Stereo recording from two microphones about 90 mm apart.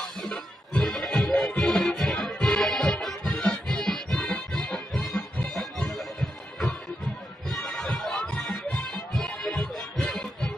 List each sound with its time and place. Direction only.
0.2 s music: 10° left (ahead or behind)
7.4 s music: 5° left (ahead or behind)